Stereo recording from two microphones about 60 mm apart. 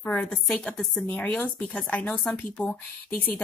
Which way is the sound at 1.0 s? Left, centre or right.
Left.